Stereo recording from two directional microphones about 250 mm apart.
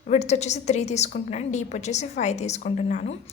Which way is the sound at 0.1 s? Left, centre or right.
Left.